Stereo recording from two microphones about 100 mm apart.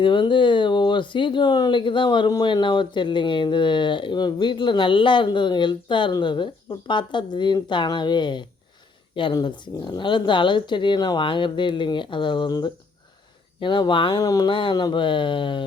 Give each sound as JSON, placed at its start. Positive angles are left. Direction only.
{"t": 0.0, "sound": "speech", "side_deg": 50}
{"t": 14.2, "sound": "speech", "side_deg": 40}
{"t": 14.5, "sound": "speech", "side_deg": 55}